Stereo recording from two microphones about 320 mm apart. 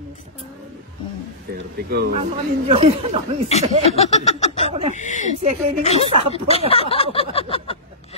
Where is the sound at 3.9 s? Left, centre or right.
Centre.